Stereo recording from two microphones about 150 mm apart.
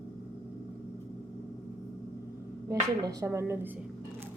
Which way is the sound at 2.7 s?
20° right (ahead or behind).